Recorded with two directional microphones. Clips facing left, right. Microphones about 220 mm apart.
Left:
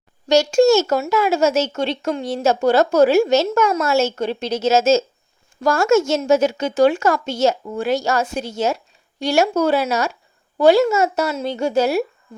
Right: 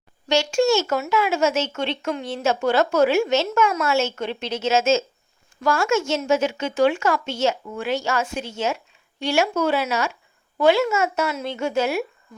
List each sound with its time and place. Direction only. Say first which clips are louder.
0.3 s a woman's voice: left 6 dB; 40° left (ahead or behind)